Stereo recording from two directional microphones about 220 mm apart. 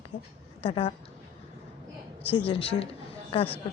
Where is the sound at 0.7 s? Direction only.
30° left (ahead or behind).